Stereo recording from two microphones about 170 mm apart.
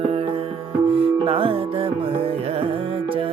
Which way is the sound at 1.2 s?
30° right (ahead or behind).